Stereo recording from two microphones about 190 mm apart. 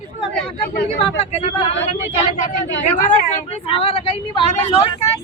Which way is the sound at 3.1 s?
40° left (ahead or behind).